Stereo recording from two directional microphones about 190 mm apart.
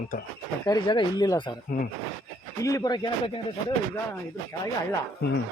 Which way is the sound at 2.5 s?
15° left (ahead or behind).